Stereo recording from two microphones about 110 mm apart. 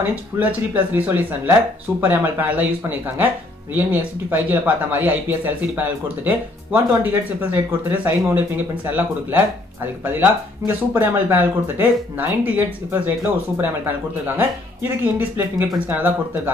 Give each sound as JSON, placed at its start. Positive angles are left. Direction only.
{"t": 0.0, "sound": "speech", "side_deg": -15}